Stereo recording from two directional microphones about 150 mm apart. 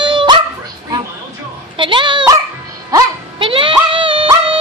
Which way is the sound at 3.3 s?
35° right (ahead or behind).